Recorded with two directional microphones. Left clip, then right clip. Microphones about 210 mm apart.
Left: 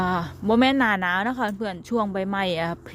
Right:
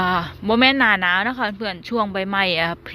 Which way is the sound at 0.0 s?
15° left (ahead or behind).